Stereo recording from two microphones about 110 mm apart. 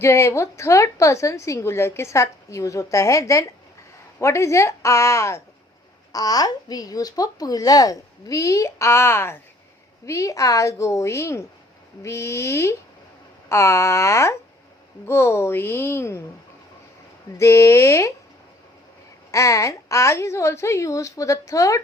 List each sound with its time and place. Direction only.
0.0 s a woman's voice: 25° left (ahead or behind)
17.3 s a woman's voice: 25° left (ahead or behind)
19.3 s a woman's voice: 30° left (ahead or behind)